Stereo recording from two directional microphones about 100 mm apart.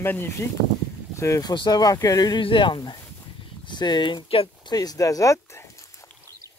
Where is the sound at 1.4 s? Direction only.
45° left (ahead or behind).